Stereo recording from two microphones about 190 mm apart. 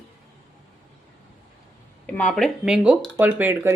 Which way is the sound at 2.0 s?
5° left (ahead or behind).